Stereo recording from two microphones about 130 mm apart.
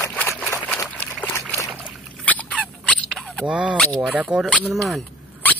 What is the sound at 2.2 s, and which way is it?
Dog, 10° left (ahead or behind).